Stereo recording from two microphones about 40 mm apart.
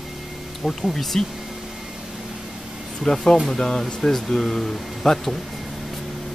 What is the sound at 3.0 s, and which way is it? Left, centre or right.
Speech, centre.